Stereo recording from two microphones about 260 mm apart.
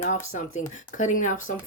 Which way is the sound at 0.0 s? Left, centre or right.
Left.